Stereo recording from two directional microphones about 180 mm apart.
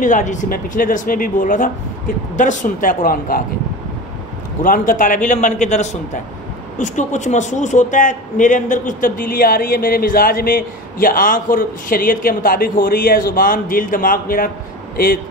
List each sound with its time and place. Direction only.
0.0 s a man's voice: 45° left (ahead or behind)
4.6 s a man's voice: 50° left (ahead or behind)